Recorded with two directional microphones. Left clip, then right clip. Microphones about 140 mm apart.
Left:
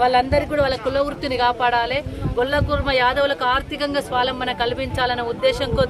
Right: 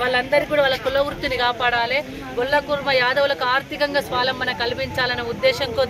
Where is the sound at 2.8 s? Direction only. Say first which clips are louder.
Left 2 dB; 45° left (ahead or behind).